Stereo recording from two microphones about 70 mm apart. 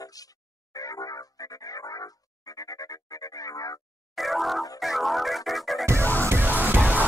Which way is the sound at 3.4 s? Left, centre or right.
Left.